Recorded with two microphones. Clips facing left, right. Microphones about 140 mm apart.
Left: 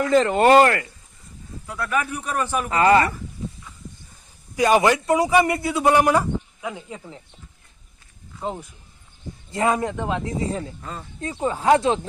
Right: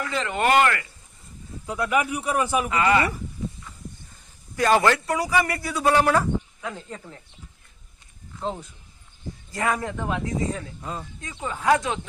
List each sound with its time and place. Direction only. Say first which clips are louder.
0.1 s speech: left 7 dB; 40° left (ahead or behind)
1.6 s a man's voice: right 2 dB; 20° right (ahead or behind)
2.6 s speech: left 8 dB; 35° left (ahead or behind)
4.5 s speech: left 2 dB; 15° left (ahead or behind)
8.4 s speech: left 1 dB; 10° left (ahead or behind)
9.5 s speech: left 5 dB; 25° left (ahead or behind)
10.4 s speech: left 2 dB; 30° left (ahead or behind)
10.8 s a man's voice: right 2 dB; 10° right (ahead or behind)
11.2 s speech: left 12 dB; 35° left (ahead or behind)